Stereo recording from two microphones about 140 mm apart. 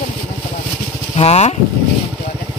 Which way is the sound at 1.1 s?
45° left (ahead or behind).